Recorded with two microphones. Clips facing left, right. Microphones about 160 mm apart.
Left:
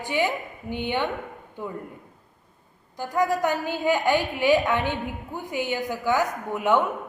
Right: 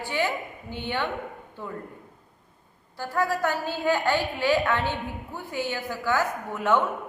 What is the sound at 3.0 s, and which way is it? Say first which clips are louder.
A woman's voice: left 2 dB; 15° left (ahead or behind).